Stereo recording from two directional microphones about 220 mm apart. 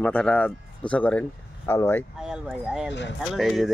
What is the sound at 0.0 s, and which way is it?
Speech, 5° left (ahead or behind).